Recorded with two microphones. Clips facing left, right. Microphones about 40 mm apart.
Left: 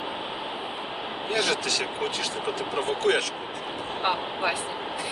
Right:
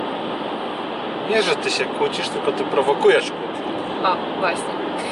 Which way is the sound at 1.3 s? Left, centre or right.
Right.